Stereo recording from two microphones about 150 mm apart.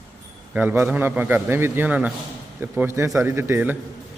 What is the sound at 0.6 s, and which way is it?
A man's voice, 15° right (ahead or behind).